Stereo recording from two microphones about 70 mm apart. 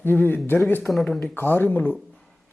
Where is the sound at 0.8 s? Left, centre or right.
Centre.